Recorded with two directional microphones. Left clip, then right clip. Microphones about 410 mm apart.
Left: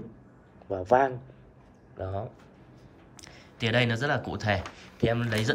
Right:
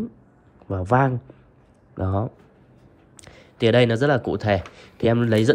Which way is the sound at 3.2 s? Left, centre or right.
Centre.